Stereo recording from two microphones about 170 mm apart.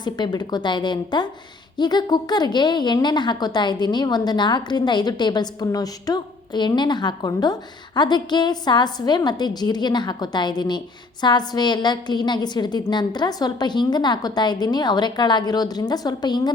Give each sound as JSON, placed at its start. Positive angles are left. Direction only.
{"t": 0.0, "sound": "a woman's voice", "side_deg": 25}